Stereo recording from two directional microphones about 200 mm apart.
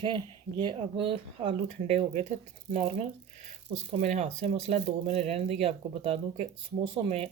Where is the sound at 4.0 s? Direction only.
35° right (ahead or behind).